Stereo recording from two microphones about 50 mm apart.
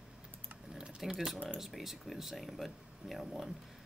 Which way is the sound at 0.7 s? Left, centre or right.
Centre.